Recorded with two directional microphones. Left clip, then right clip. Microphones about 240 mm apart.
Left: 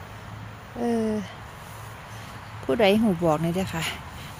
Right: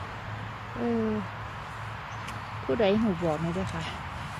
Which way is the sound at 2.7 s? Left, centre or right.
Left.